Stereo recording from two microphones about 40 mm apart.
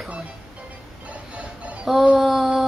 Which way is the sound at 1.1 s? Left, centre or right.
Right.